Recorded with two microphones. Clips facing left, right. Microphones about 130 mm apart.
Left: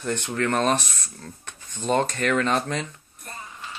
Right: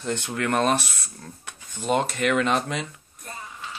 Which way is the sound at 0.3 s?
5° right (ahead or behind).